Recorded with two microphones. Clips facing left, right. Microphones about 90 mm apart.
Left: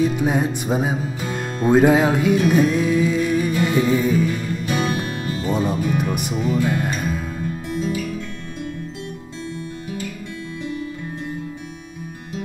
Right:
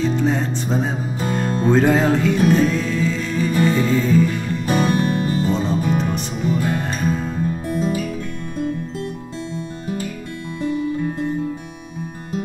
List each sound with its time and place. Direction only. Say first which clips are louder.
0.0 s music: even; 10° left (ahead or behind)
4.6 s music: right 4 dB; 40° right (ahead or behind)
4.9 s music: right 6 dB; 5° left (ahead or behind)
5.2 s music: right 5 dB; 40° right (ahead or behind)
5.5 s music: even; 10° left (ahead or behind)
5.9 s speech: even; 5° left (ahead or behind)
7.4 s music: right 2 dB; 40° right (ahead or behind)